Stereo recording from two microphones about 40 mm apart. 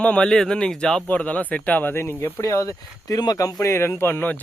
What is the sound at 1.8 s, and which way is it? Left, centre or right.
Speech, left.